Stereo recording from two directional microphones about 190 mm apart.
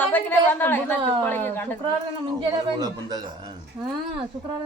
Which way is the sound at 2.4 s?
20° right (ahead or behind).